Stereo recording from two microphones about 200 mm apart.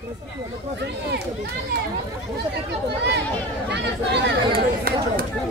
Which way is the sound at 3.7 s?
55° right (ahead or behind).